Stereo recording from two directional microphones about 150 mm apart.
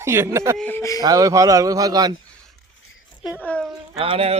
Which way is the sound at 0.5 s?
10° left (ahead or behind).